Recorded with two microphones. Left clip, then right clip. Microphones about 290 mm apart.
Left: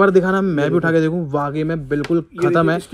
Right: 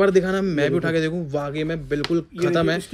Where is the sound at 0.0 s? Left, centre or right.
Centre.